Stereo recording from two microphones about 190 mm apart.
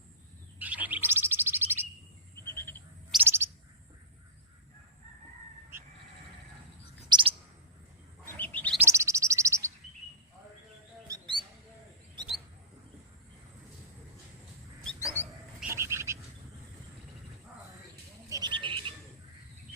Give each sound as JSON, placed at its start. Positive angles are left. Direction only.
{"t": 0.6, "sound": "bird", "side_deg": -10}
{"t": 2.3, "sound": "frog", "side_deg": 10}
{"t": 3.2, "sound": "bird", "side_deg": -15}
{"t": 7.1, "sound": "chirp", "side_deg": -25}
{"t": 8.4, "sound": "chirp", "side_deg": 10}
{"t": 8.8, "sound": "bird", "side_deg": -15}
{"t": 11.1, "sound": "a sound", "side_deg": -25}
{"t": 14.9, "sound": "dog", "side_deg": 15}
{"t": 15.7, "sound": "bird", "side_deg": -15}
{"t": 18.3, "sound": "a sound", "side_deg": -20}